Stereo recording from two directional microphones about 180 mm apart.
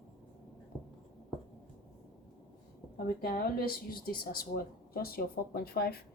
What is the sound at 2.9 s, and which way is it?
Speech, 55° left (ahead or behind).